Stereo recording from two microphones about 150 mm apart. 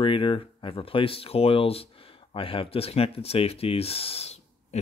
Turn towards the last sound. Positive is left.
turn(degrees=45)  # may be behind; listen again after turning